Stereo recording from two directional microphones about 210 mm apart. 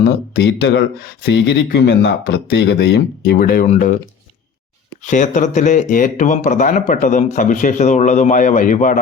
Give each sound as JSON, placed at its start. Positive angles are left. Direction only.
{"t": 0.0, "sound": "speech", "side_deg": 55}
{"t": 5.0, "sound": "speech", "side_deg": 35}